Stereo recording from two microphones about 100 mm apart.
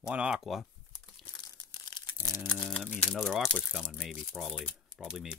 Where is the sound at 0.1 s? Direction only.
10° right (ahead or behind).